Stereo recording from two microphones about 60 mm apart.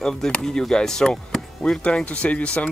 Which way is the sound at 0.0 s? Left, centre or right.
Centre.